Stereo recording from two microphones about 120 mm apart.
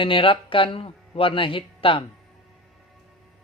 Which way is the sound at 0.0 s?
45° left (ahead or behind).